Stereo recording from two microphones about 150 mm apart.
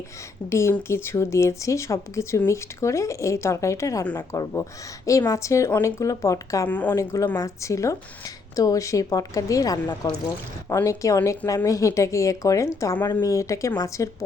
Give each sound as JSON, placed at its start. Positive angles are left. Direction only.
{"t": 0.5, "sound": "speech", "side_deg": 15}